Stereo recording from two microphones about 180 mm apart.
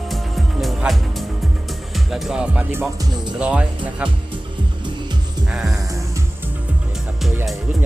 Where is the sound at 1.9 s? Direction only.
Centre (ahead or behind).